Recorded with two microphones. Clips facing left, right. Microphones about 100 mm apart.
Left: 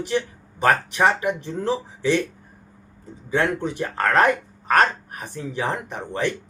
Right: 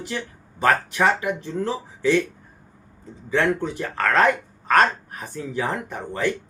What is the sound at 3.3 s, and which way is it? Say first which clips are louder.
Speech: right 1 dB; 20° left (ahead or behind).